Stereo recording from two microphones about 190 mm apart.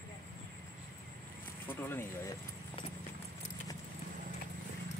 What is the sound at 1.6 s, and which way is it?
Speech, 10° left (ahead or behind).